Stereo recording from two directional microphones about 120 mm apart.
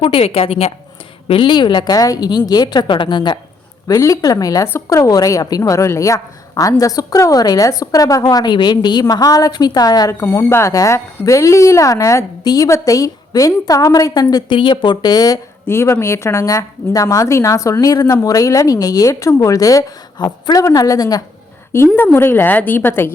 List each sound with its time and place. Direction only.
0.0 s a woman's voice: 50° left (ahead or behind)
1.3 s a woman's voice: 45° left (ahead or behind)
15.6 s speech: 20° left (ahead or behind)
21.9 s a woman's voice: 20° left (ahead or behind)